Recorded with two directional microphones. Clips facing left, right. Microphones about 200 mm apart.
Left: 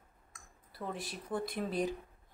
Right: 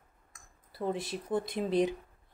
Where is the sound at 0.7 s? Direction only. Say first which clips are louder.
Right 8 dB; 25° right (ahead or behind).